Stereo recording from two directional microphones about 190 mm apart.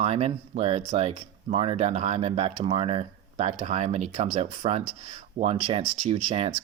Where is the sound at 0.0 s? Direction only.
30° right (ahead or behind).